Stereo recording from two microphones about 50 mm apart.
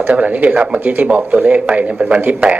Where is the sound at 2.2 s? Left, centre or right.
Right.